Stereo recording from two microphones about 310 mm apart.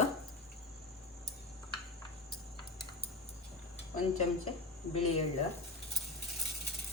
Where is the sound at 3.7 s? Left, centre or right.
Left.